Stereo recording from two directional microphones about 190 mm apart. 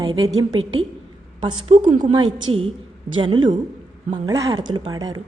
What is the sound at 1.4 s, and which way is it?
A woman's voice, 25° right (ahead or behind).